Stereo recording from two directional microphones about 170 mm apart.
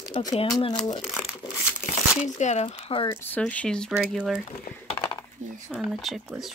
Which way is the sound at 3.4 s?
5° left (ahead or behind).